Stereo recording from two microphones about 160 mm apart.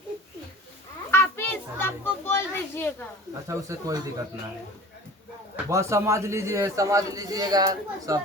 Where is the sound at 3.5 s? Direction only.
20° right (ahead or behind).